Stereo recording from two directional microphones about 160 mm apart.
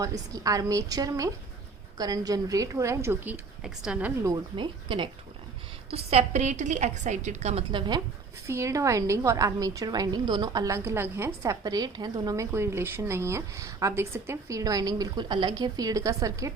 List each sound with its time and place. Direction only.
0.0 s a woman's voice: 20° right (ahead or behind)
4.5 s a woman's voice: 30° right (ahead or behind)
7.7 s a woman's voice: 30° right (ahead or behind)
8.4 s a woman's voice: 20° right (ahead or behind)